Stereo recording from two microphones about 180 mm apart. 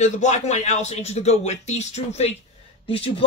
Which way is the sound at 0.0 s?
40° left (ahead or behind).